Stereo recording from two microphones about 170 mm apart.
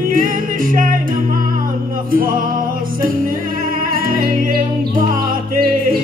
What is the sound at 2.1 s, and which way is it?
Music, 55° right (ahead or behind).